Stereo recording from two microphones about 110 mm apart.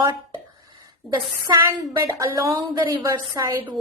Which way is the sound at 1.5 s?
30° right (ahead or behind).